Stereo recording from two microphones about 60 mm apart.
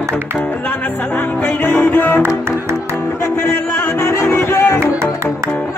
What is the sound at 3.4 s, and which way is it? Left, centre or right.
Music, left.